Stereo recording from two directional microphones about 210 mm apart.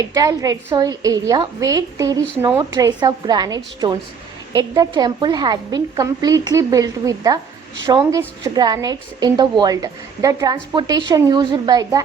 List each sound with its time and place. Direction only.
0.0 s a woman's voice: 15° right (ahead or behind)